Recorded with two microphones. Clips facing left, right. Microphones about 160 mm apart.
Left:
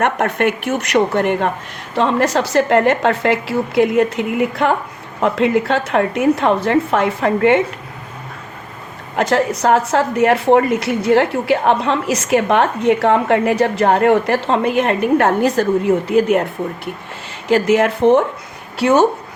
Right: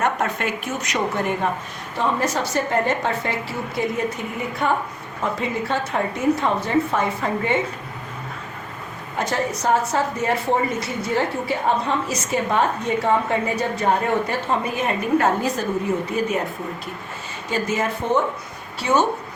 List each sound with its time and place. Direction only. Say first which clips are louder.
0.0 s a woman's voice: left 6 dB; 65° left (ahead or behind)
2.0 s a woman's voice: left 7 dB; 80° left
9.1 s a woman's voice: left 8 dB; 85° left; by 16.9 s 65° left (ahead or behind)
17.5 s a woman's voice: left 10 dB; 80° left